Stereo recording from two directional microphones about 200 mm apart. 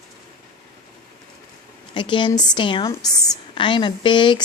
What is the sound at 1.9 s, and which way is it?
A woman's voice, 25° left (ahead or behind).